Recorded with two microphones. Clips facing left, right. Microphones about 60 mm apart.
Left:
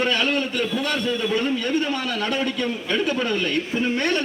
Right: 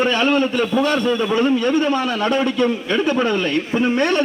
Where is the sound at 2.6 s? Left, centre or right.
Centre; by 4.2 s right.